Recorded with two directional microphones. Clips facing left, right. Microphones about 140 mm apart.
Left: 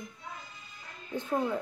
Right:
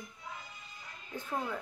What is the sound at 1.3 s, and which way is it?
Speech, 15° left (ahead or behind).